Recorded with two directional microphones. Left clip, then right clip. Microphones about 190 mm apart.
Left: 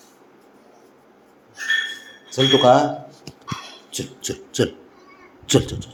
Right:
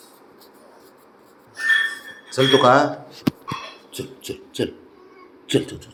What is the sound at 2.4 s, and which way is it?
Speech, 10° right (ahead or behind).